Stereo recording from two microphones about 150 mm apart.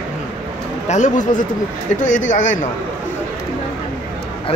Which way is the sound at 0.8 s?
50° left (ahead or behind).